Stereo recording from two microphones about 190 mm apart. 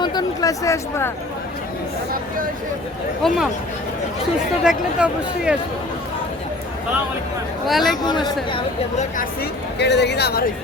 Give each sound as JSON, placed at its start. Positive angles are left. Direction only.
{"t": 0.0, "sound": "speech", "side_deg": 20}
{"t": 3.2, "sound": "speech", "side_deg": 0}
{"t": 4.6, "sound": "speech", "side_deg": -5}
{"t": 7.7, "sound": "speech", "side_deg": 0}
{"t": 8.0, "sound": "a woman's voice", "side_deg": 20}
{"t": 9.0, "sound": "speech", "side_deg": 45}
{"t": 9.7, "sound": "speech", "side_deg": 65}